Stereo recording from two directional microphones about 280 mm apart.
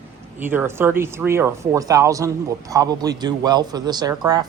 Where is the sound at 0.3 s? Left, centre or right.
Centre.